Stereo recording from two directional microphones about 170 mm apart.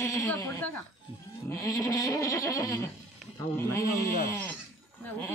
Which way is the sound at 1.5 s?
20° left (ahead or behind).